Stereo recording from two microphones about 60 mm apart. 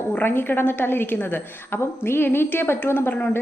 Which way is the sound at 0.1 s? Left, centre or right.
Left.